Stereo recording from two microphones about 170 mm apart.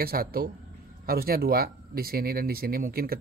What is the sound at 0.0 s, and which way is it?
Speech, 60° right (ahead or behind).